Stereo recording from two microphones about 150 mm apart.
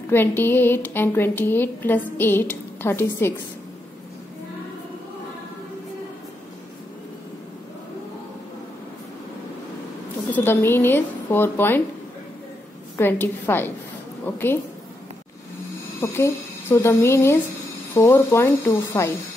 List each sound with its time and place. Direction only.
0.4 s speech: 15° left (ahead or behind)
10.3 s speech: 15° left (ahead or behind)
12.9 s speech: 15° left (ahead or behind)
16.0 s a woman's voice: 20° left (ahead or behind)